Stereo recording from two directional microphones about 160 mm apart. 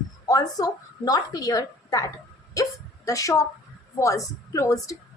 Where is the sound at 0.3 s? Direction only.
20° left (ahead or behind).